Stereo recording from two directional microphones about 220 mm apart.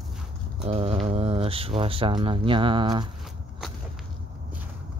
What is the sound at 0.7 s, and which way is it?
Speech, 25° right (ahead or behind).